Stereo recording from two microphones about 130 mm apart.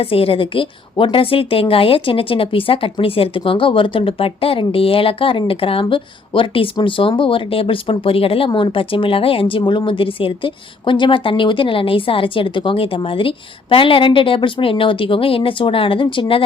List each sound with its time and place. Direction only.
0.0 s speech: 45° left (ahead or behind)